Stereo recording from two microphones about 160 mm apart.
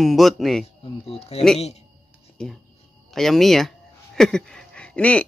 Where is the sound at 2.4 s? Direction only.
5° left (ahead or behind).